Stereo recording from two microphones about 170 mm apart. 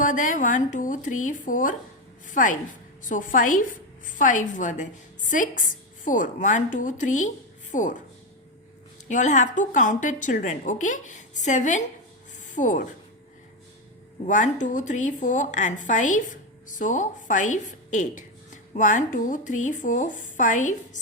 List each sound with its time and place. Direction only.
0.0 s a woman's voice: 50° left (ahead or behind)
9.0 s a woman's voice: 45° left (ahead or behind)
14.3 s a woman's voice: 50° left (ahead or behind)